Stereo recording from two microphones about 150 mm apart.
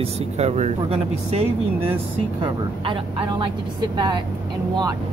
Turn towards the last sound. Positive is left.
turn(degrees=-35)  # may be behind; listen again after turning